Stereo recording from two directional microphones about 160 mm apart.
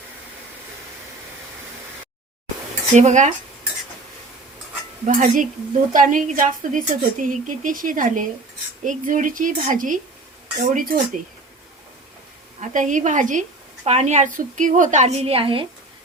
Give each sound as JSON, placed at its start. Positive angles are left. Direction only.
{"t": 2.9, "sound": "speech", "side_deg": -45}
{"t": 5.0, "sound": "a woman's voice", "side_deg": -55}
{"t": 12.5, "sound": "speech", "side_deg": -50}